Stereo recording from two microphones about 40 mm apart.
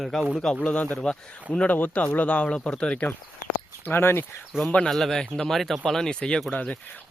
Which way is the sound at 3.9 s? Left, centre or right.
Left.